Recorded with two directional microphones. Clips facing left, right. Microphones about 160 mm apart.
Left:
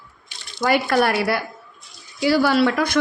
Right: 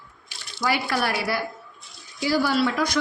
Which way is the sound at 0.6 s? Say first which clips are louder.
Left 6 dB; 50° left (ahead or behind).